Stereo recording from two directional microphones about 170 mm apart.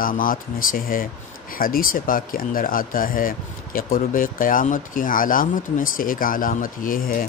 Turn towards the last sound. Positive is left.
turn(degrees=55)  # may be behind; listen again after turning